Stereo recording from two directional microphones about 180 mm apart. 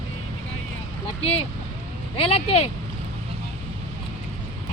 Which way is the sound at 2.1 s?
35° left (ahead or behind).